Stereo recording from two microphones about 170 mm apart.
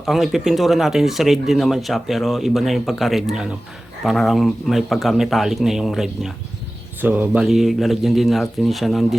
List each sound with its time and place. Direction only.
0.0 s speech: centre (ahead or behind)